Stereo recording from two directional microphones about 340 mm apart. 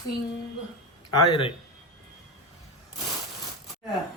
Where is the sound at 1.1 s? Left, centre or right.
Centre.